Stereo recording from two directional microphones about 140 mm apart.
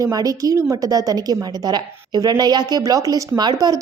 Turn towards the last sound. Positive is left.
turn(degrees=-30)  # may be behind; listen again after turning